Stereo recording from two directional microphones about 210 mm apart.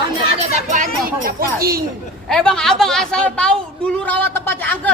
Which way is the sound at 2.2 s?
5° left (ahead or behind).